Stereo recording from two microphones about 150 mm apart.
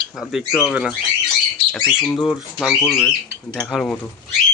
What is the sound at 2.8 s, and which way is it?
Speech, 15° left (ahead or behind).